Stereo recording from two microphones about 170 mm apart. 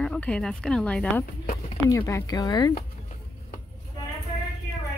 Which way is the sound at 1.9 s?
15° left (ahead or behind).